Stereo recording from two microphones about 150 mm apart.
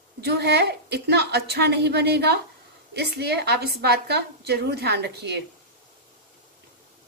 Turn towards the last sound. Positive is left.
turn(degrees=-90)